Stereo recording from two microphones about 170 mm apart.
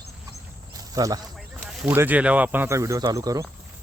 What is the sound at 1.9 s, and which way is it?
Speech, 10° right (ahead or behind).